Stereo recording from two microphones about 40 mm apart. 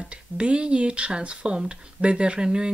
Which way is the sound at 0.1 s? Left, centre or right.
Right.